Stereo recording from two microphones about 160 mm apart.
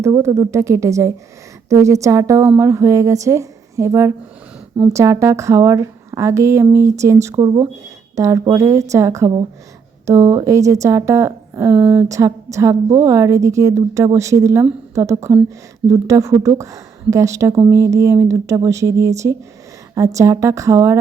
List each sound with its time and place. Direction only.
0.0 s a woman's voice: 20° right (ahead or behind)